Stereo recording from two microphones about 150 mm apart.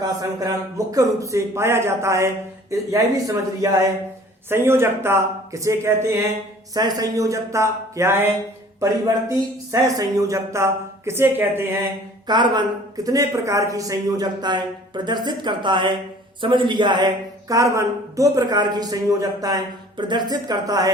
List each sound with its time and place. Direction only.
0.0 s a man's voice: 25° right (ahead or behind)
9.8 s speech: 20° right (ahead or behind)
12.3 s a man's voice: 30° right (ahead or behind)